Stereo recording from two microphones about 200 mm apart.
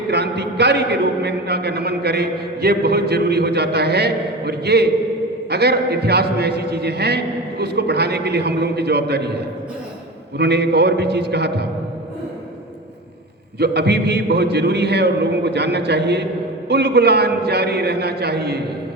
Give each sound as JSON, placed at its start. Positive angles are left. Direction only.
{"t": 0.1, "sound": "a man's voice", "side_deg": -55}
{"t": 13.6, "sound": "a man's voice", "side_deg": -55}